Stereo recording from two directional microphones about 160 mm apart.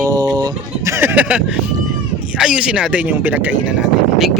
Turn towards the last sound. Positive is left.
turn(degrees=-5)  # may be behind; listen again after turning